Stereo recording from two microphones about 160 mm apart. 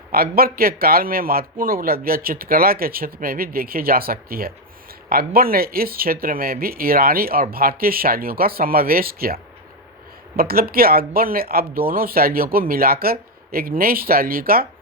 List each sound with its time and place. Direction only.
0.1 s a man's voice: 70° right (ahead or behind)